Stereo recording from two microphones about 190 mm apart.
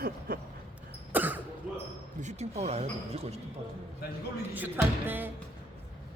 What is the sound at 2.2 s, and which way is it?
Speech, 35° right (ahead or behind).